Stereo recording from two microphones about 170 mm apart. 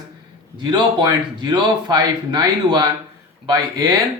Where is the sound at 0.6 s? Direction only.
25° right (ahead or behind).